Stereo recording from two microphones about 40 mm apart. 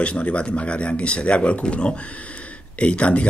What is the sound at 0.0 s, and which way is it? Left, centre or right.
Speech, left.